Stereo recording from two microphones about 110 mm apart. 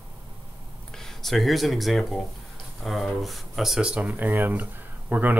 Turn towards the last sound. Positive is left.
turn(degrees=-15)  # may be behind; listen again after turning